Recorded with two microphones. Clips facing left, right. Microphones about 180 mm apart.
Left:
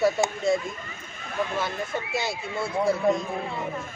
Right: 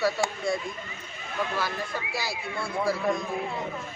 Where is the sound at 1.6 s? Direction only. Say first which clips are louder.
Left 2 dB; 20° left (ahead or behind).